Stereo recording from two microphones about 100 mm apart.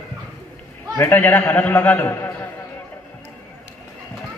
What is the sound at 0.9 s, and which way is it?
A man's voice, 20° left (ahead or behind).